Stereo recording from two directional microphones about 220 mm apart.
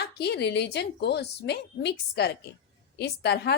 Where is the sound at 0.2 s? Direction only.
50° left (ahead or behind).